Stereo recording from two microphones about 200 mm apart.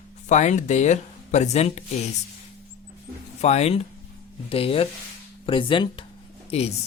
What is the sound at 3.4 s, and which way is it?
Speech, 35° left (ahead or behind).